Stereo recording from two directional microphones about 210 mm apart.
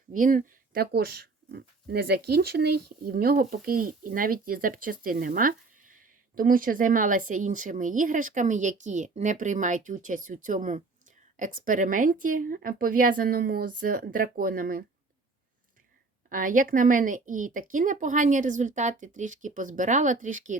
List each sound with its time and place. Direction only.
0.1 s speech: 40° right (ahead or behind)
16.3 s speech: 40° right (ahead or behind)